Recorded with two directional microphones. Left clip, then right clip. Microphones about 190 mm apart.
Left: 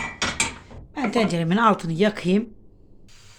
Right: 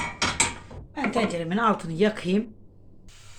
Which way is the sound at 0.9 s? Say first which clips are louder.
Left 3 dB; 60° left (ahead or behind).